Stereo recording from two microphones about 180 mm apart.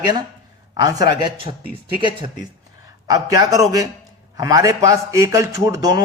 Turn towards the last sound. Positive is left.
turn(degrees=-20)  # may be behind; listen again after turning